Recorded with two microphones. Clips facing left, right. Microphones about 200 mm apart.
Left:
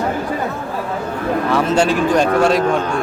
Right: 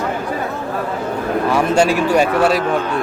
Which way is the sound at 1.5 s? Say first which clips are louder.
Right 1 dB; 10° right (ahead or behind).